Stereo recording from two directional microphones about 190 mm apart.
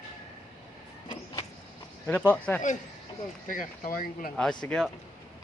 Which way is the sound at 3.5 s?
45° left (ahead or behind).